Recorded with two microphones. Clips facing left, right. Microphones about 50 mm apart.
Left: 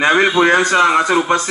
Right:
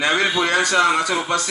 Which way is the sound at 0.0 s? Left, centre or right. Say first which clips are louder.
Left 7 dB; left.